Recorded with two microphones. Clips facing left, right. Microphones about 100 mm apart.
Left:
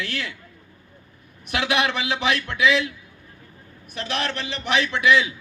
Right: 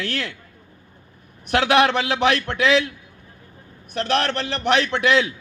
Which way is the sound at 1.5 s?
65° right (ahead or behind).